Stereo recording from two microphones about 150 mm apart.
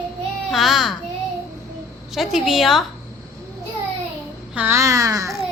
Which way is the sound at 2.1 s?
Centre (ahead or behind).